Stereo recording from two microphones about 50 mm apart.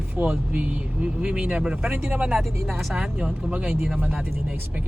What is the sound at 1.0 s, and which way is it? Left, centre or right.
Speech, centre.